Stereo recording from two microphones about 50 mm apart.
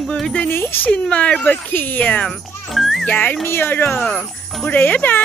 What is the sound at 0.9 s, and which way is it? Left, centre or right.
Speech, left.